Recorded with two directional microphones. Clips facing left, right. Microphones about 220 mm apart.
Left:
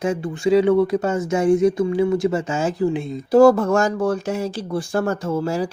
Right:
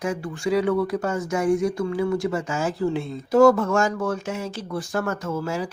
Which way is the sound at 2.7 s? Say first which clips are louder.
Left 3 dB; 15° left (ahead or behind).